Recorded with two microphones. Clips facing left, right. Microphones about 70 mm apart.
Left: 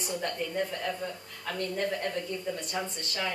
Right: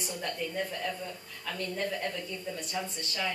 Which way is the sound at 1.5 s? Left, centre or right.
Left.